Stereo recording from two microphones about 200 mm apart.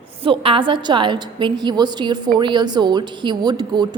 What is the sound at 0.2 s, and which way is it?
A woman's voice, 25° right (ahead or behind).